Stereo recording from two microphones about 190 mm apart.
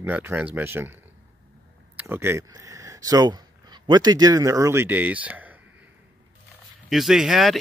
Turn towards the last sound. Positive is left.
turn(degrees=0)  # may be behind; listen again after turning